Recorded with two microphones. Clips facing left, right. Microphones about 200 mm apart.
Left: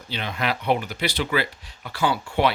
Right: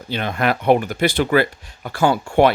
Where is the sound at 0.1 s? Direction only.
50° right (ahead or behind).